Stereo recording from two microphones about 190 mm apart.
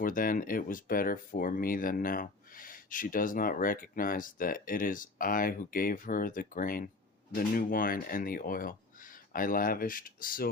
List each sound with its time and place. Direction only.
0.0 s speech: 45° left (ahead or behind)